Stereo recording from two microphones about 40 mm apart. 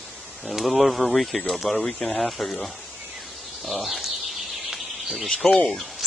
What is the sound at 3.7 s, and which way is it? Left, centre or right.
Speech, centre.